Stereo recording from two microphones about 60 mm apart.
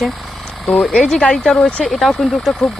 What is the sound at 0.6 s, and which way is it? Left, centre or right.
Speech, centre.